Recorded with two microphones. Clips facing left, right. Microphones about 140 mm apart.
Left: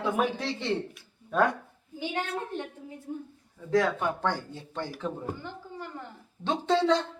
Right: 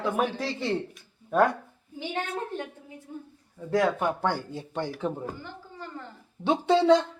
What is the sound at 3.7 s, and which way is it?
Speech, 10° right (ahead or behind).